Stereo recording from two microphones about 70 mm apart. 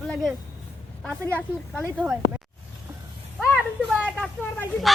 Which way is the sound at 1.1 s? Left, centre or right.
Centre.